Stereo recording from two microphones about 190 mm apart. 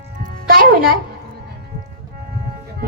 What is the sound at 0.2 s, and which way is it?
Music, 50° right (ahead or behind).